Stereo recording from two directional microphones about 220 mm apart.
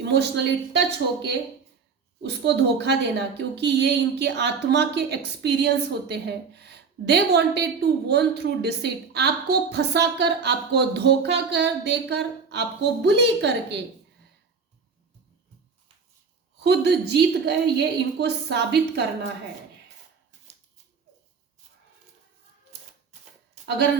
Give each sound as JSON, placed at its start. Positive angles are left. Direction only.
{"t": 0.0, "sound": "a woman's voice", "side_deg": -50}
{"t": 2.2, "sound": "a woman's voice", "side_deg": -50}
{"t": 16.6, "sound": "a woman's voice", "side_deg": -50}